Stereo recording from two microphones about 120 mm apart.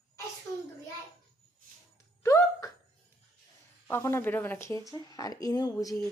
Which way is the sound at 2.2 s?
25° left (ahead or behind).